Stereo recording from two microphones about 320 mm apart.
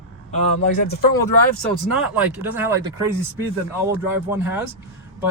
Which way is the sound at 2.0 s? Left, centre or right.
Centre.